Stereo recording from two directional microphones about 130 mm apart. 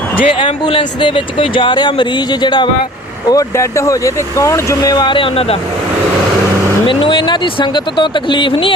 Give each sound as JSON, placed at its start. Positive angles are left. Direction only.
{"t": 0.3, "sound": "speech", "side_deg": 40}
{"t": 3.2, "sound": "speech", "side_deg": 25}
{"t": 6.8, "sound": "speech", "side_deg": 40}